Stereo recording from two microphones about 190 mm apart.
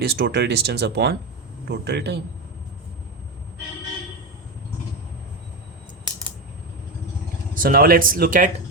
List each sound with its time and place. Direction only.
0.0 s speech: 60° right (ahead or behind)
7.5 s speech: 50° right (ahead or behind)